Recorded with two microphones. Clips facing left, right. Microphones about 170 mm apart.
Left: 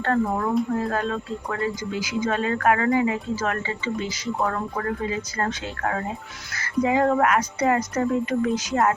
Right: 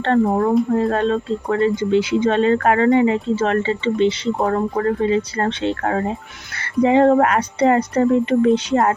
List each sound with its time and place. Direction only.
0.0 s speech: 30° right (ahead or behind)
4.4 s speech: 35° right (ahead or behind)